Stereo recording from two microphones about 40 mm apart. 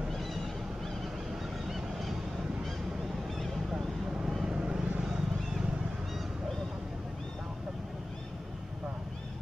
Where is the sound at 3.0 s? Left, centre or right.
Centre.